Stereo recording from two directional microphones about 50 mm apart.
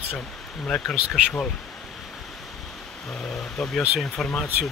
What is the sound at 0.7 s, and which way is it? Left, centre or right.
Speech, centre.